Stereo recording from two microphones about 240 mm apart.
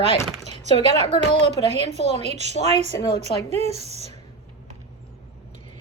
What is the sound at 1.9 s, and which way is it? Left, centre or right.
A woman's voice, right.